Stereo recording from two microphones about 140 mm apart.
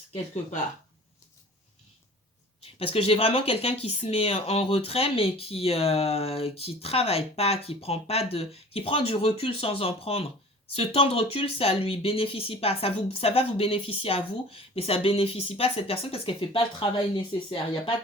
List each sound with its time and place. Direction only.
2.7 s speech: 40° left (ahead or behind)